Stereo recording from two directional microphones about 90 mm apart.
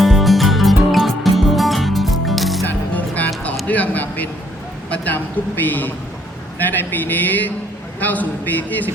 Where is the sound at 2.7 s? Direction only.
20° left (ahead or behind).